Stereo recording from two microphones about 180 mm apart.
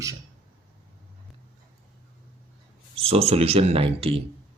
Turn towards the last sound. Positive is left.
turn(degrees=-30)  # may be behind; listen again after turning